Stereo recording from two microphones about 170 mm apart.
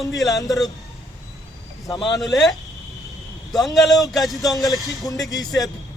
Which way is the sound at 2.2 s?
Centre (ahead or behind).